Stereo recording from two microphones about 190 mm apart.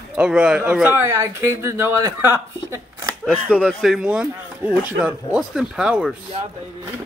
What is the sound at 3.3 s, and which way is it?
Speech, centre (ahead or behind).